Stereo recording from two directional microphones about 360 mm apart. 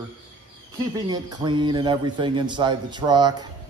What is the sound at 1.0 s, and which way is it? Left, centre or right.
A man's voice, centre.